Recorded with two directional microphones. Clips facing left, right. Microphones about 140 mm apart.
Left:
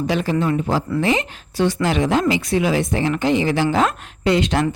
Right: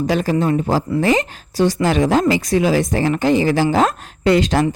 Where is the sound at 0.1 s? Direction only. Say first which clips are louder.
Right 2 dB; 40° right (ahead or behind).